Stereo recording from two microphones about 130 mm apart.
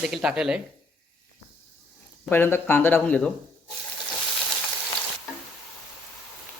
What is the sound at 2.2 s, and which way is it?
Speech, 15° left (ahead or behind).